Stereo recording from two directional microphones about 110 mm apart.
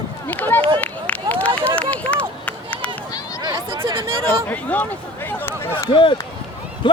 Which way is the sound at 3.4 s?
45° right (ahead or behind).